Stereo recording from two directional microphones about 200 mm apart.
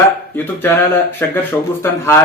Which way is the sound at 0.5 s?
10° left (ahead or behind).